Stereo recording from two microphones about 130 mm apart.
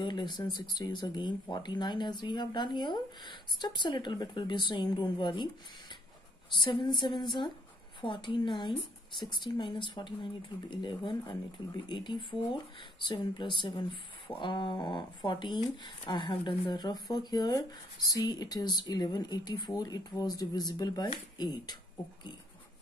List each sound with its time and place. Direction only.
0.0 s speech: 35° left (ahead or behind)
6.6 s speech: 40° left (ahead or behind)